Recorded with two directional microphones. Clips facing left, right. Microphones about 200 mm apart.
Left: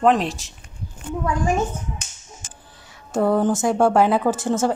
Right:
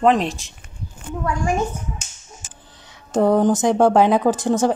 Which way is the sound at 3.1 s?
20° right (ahead or behind).